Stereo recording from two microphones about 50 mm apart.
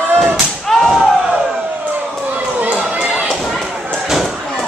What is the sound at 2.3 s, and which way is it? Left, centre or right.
Run, right.